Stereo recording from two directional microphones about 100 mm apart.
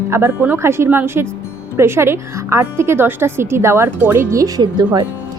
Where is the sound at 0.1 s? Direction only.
20° right (ahead or behind).